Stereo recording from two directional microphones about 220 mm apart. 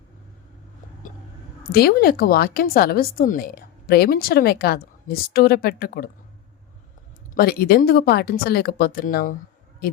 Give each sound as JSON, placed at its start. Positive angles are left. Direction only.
{"t": 1.7, "sound": "speech", "side_deg": 45}
{"t": 7.3, "sound": "speech", "side_deg": 45}